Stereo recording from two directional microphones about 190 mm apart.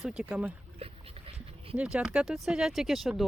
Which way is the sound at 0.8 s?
30° right (ahead or behind).